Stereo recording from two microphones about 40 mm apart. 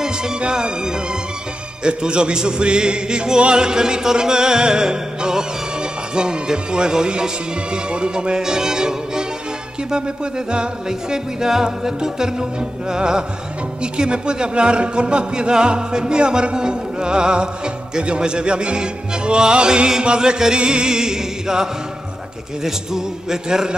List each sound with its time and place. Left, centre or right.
0.4 s speech: right
7.7 s music: right
10.5 s music: centre
12.9 s speech: centre
22.6 s music: centre